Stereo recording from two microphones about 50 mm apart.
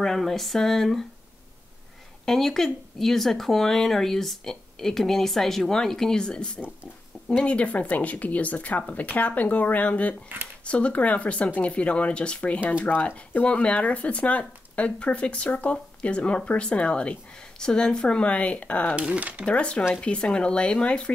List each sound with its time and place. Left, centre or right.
0.0 s speech: centre
2.2 s speech: centre; by 18.9 s left
18.9 s speech: right
19.4 s speech: left